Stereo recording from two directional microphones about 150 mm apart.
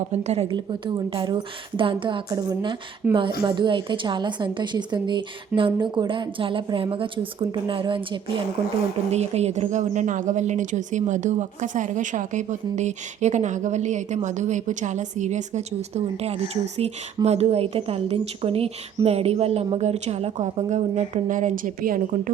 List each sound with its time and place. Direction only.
0.1 s speech: 45° right (ahead or behind)
0.5 s a woman's voice: 30° right (ahead or behind)
3.0 s speech: 10° right (ahead or behind)
3.4 s a woman's voice: 30° right (ahead or behind)
9.0 s speech: 45° right (ahead or behind); by 22.3 s 65° right (ahead or behind)